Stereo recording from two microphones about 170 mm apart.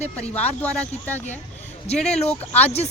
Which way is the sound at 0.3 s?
10° left (ahead or behind).